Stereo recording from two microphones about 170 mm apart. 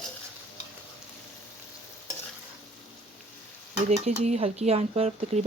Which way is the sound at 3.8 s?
40° right (ahead or behind).